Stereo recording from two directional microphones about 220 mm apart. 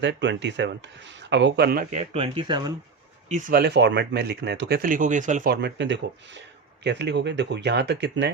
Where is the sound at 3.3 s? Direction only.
40° right (ahead or behind).